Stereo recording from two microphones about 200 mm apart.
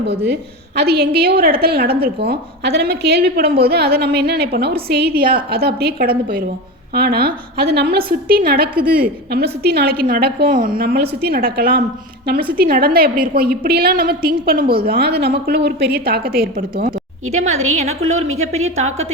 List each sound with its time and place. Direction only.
0.8 s a woman's voice: 55° right (ahead or behind)
17.3 s a woman's voice: 35° right (ahead or behind)